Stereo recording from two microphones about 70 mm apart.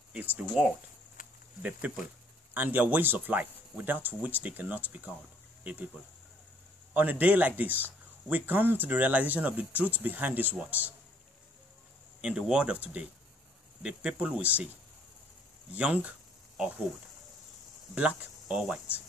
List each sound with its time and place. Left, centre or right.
1.6 s speech: right
6.9 s speech: right
12.2 s speech: centre
15.7 s speech: centre
17.9 s speech: centre